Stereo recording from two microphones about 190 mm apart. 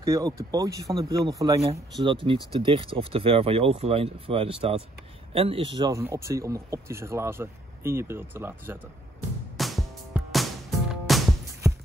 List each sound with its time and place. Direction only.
0.0 s speech: 15° right (ahead or behind)
9.6 s music: centre (ahead or behind)